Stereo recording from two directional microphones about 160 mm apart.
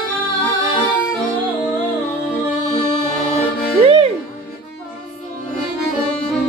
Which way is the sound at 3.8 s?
35° right (ahead or behind).